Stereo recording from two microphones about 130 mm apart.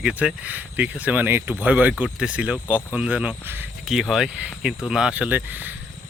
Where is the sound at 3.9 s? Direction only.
5° right (ahead or behind).